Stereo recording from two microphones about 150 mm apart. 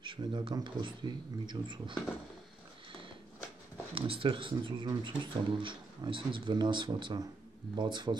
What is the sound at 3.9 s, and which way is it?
Speech, 35° right (ahead or behind).